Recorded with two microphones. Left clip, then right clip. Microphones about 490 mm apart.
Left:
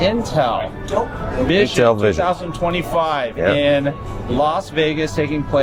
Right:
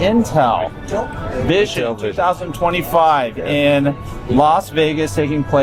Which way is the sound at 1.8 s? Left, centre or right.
Left.